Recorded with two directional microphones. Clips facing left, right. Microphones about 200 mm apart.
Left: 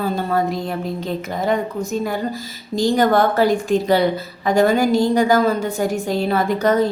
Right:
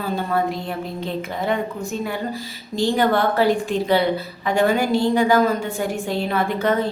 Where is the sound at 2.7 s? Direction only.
40° left (ahead or behind).